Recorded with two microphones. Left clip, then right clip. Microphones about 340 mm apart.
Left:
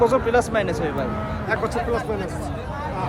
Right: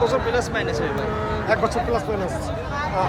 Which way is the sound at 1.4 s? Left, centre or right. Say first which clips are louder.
Right 2 dB; centre.